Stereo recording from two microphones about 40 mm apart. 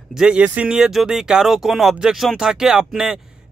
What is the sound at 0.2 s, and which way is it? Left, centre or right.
Speech, centre.